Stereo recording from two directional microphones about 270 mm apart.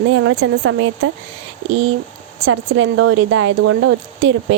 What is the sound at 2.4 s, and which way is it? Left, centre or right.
Speech, right.